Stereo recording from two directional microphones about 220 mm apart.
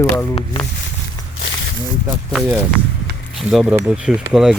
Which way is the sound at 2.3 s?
Centre (ahead or behind).